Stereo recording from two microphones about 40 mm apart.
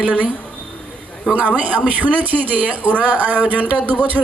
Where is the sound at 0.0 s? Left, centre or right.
Right.